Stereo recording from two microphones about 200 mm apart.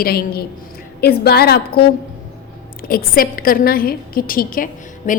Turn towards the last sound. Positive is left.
turn(degrees=45)  # may be behind; listen again after turning